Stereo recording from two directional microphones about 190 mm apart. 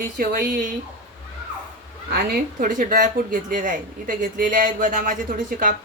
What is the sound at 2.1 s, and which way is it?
Speech, 45° right (ahead or behind).